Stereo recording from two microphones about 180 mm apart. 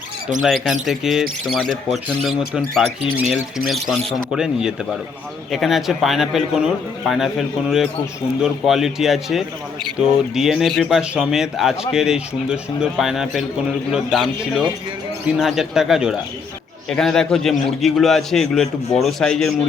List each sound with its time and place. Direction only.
0.4 s speech: centre (ahead or behind)